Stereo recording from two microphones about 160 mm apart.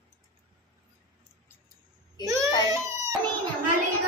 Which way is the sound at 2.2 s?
20° right (ahead or behind).